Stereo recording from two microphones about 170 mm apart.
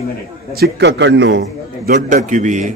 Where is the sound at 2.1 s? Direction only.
45° right (ahead or behind).